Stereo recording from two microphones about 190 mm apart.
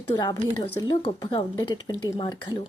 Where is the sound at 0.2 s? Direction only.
20° left (ahead or behind).